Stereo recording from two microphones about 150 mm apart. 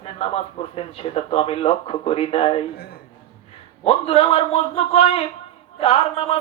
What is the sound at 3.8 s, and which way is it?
A man's voice, 45° left (ahead or behind).